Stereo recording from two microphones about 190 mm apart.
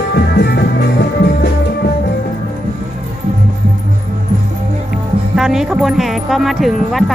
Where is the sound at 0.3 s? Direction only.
60° left (ahead or behind).